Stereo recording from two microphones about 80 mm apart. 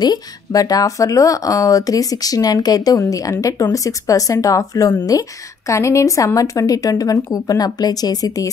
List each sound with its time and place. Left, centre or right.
0.0 s speech: left